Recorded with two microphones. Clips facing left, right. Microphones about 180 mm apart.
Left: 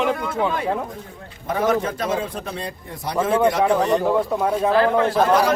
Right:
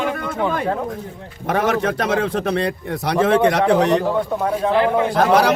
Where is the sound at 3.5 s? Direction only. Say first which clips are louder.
Right 2 dB; 75° right (ahead or behind).